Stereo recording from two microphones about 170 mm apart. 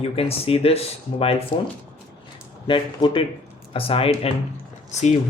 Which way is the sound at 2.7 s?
30° left (ahead or behind).